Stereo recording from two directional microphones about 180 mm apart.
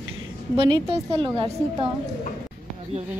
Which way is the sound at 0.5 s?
30° right (ahead or behind).